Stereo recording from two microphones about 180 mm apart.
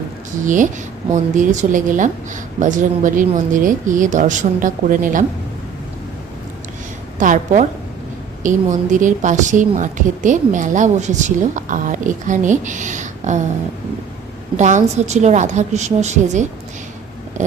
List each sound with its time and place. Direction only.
0.4 s a woman's voice: 45° right (ahead or behind)
7.2 s a woman's voice: 45° right (ahead or behind)
14.5 s a woman's voice: 40° right (ahead or behind)